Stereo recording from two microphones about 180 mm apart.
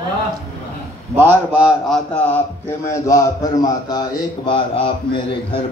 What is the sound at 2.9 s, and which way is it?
A man's voice, 20° left (ahead or behind).